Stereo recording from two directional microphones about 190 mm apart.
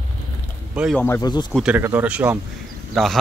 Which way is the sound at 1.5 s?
5° right (ahead or behind).